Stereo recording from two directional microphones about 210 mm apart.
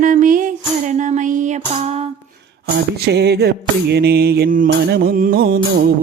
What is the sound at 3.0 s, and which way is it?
Music, 50° right (ahead or behind).